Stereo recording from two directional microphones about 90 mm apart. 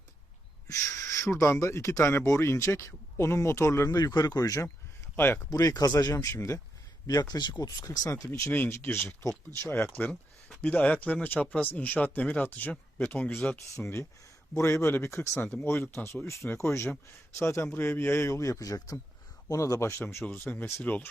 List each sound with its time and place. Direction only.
0.7 s speech: 35° left (ahead or behind)
3.9 s speech: 45° left (ahead or behind); by 5.5 s 25° left (ahead or behind)
5.5 s speech: 40° left (ahead or behind)
8.3 s speech: 25° left (ahead or behind)
13.8 s speech: 30° left (ahead or behind)
20.2 s speech: 15° left (ahead or behind)